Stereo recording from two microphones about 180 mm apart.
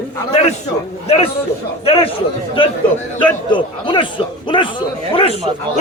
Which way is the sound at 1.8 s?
30° left (ahead or behind).